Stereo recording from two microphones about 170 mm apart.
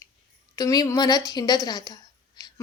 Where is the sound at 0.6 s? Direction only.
20° left (ahead or behind).